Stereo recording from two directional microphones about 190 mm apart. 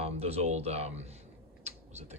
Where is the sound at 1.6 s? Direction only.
35° right (ahead or behind).